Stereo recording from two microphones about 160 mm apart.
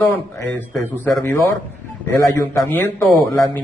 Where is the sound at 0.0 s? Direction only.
15° left (ahead or behind).